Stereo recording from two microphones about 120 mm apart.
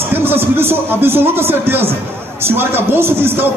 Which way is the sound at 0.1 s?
20° right (ahead or behind).